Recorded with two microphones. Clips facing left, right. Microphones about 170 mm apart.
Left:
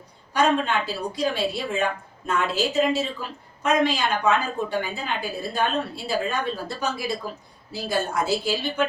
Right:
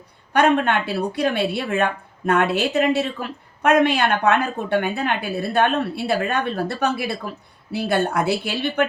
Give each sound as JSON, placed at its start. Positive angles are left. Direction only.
{"t": 0.3, "sound": "speech", "side_deg": -65}